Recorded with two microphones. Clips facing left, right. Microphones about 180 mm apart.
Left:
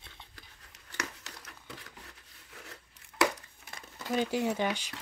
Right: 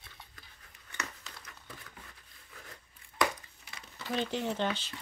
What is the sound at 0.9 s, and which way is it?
Crumpling, 80° left.